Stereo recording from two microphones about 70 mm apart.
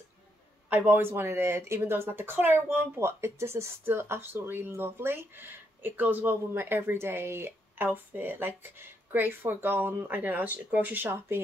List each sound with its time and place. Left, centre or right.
0.7 s speech: right